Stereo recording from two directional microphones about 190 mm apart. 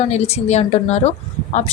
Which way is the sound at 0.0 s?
35° left (ahead or behind).